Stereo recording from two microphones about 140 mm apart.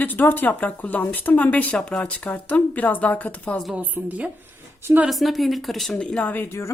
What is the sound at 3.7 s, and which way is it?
A woman's voice, 10° right (ahead or behind).